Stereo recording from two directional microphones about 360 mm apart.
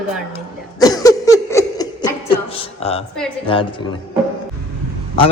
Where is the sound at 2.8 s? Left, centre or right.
Centre.